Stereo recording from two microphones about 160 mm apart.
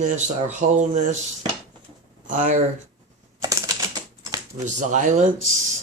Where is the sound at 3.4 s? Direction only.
25° right (ahead or behind).